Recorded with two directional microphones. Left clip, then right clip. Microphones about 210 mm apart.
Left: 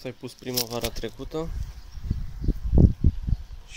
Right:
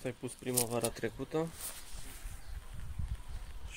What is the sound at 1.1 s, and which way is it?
Speech, 10° left (ahead or behind).